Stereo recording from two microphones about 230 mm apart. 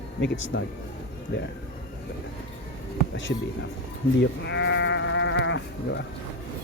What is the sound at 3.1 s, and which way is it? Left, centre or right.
Speech, left.